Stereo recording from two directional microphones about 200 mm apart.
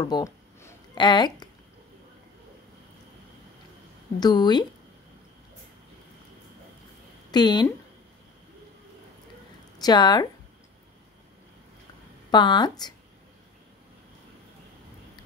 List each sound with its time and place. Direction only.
0.0 s a sound: 15° left (ahead or behind)
4.2 s speech: 20° left (ahead or behind)
7.2 s speech: 20° left (ahead or behind)
9.8 s speech: 20° left (ahead or behind)
12.3 s speech: 20° left (ahead or behind)